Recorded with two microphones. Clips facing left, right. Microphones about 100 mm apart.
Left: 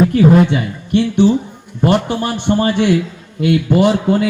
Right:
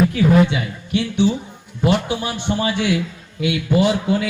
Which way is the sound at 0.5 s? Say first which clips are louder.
Left 6 dB; 50° left (ahead or behind).